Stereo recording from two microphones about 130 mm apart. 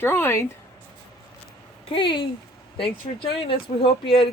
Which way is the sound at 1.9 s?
40° left (ahead or behind).